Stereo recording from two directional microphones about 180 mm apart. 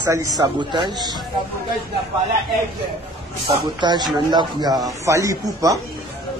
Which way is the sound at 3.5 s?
25° right (ahead or behind).